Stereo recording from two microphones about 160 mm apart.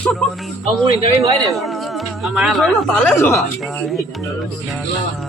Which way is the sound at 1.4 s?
Centre (ahead or behind).